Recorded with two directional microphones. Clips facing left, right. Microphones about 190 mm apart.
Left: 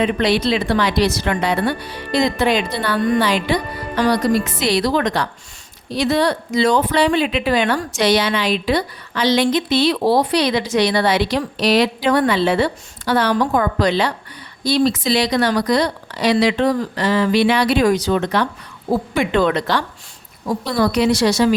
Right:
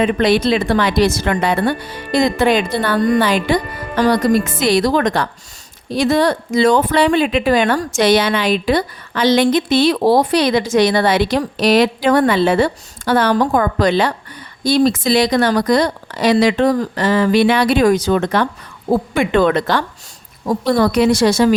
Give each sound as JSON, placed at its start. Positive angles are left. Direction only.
{"t": 0.0, "sound": "speech", "side_deg": -50}